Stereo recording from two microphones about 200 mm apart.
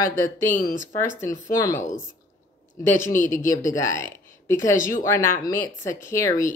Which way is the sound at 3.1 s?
10° left (ahead or behind).